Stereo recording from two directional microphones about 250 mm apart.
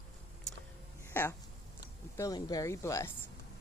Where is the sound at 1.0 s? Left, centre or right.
Centre.